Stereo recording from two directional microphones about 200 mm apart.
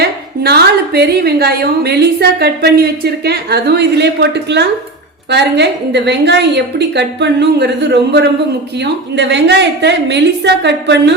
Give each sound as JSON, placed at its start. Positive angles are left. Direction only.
{"t": 0.0, "sound": "a woman's voice", "side_deg": -55}